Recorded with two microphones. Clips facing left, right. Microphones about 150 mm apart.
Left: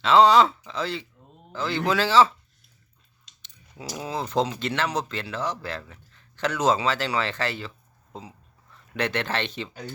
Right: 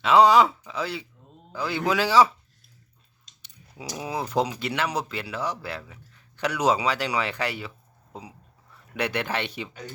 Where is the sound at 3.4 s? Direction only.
10° right (ahead or behind).